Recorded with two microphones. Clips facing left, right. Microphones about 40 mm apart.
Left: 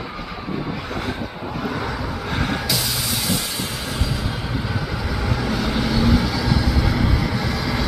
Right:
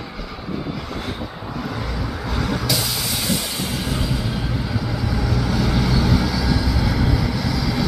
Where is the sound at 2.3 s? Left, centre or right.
Left.